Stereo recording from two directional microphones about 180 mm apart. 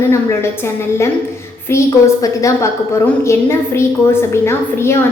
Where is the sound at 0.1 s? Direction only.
15° left (ahead or behind).